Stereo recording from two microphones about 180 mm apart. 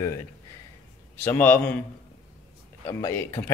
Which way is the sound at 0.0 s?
20° left (ahead or behind).